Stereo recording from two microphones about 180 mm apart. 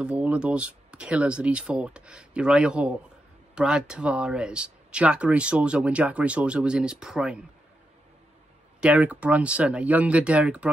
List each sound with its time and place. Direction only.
0.0 s speech: 5° right (ahead or behind)
8.8 s speech: 5° right (ahead or behind)